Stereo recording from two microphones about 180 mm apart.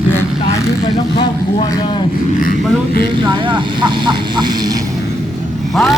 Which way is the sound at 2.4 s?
55° left (ahead or behind).